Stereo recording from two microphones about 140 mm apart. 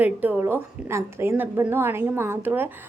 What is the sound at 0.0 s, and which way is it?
A woman's voice, 15° right (ahead or behind).